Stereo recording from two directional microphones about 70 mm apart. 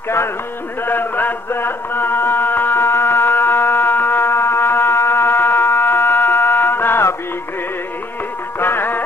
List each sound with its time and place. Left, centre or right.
0.8 s music: left
8.5 s music: left